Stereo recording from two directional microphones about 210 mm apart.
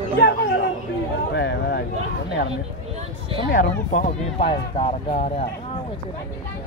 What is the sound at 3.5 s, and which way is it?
Speech, 35° left (ahead or behind).